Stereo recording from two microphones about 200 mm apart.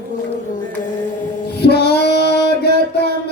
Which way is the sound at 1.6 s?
55° left (ahead or behind).